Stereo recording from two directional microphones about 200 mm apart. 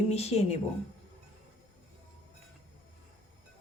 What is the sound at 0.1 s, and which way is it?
Speech, 30° left (ahead or behind).